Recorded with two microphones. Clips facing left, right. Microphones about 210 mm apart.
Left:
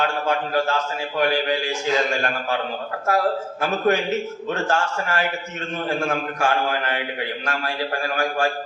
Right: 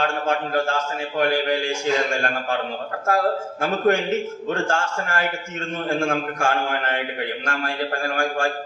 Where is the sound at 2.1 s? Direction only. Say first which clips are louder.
Even; 45° right (ahead or behind).